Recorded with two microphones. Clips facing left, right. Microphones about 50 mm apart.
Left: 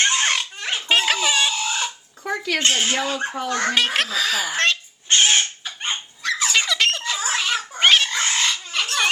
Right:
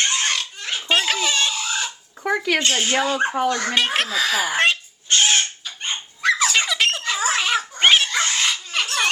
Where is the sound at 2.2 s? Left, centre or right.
Centre.